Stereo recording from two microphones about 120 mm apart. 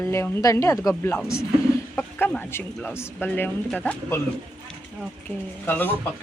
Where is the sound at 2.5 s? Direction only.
20° left (ahead or behind).